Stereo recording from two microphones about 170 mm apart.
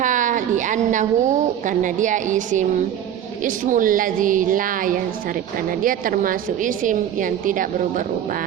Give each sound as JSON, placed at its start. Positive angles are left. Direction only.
{"t": 0.0, "sound": "a woman's voice", "side_deg": -50}